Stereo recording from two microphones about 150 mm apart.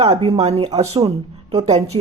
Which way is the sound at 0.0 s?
30° right (ahead or behind).